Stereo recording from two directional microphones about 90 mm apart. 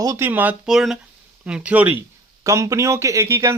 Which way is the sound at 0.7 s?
5° right (ahead or behind).